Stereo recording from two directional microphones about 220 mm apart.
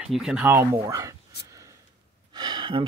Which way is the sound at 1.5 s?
15° right (ahead or behind).